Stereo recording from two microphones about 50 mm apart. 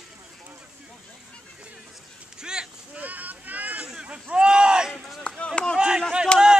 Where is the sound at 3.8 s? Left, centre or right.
Centre.